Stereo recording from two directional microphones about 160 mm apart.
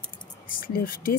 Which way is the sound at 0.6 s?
60° left (ahead or behind).